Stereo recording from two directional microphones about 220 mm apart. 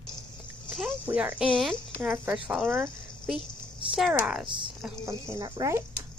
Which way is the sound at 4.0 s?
5° right (ahead or behind).